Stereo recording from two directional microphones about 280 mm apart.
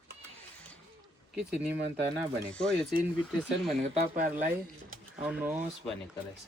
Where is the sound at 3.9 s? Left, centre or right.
Right.